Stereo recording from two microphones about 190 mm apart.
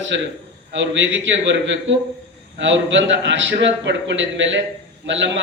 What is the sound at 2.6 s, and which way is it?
A man's voice, 75° right (ahead or behind).